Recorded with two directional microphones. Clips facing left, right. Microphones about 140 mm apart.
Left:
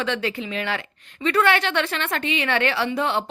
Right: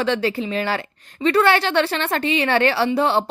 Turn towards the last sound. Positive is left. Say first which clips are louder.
# right 5 dB
turn(degrees=-35)  # may be behind; listen again after turning